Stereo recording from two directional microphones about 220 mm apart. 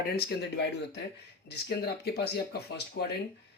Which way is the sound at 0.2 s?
50° left (ahead or behind).